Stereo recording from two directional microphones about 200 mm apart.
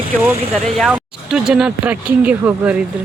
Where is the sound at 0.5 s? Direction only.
Centre (ahead or behind).